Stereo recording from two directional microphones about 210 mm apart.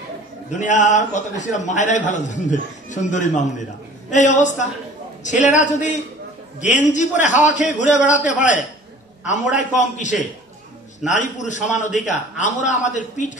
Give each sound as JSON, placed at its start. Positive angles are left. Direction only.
{"t": 0.5, "sound": "a man's voice", "side_deg": 35}